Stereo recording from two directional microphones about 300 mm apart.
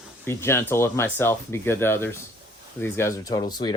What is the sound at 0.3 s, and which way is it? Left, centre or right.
Speech, centre.